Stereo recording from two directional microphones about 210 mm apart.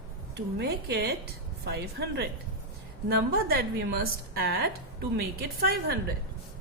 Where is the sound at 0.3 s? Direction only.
50° right (ahead or behind).